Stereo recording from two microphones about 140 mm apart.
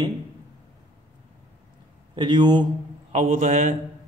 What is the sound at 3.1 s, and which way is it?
Speech, 50° right (ahead or behind).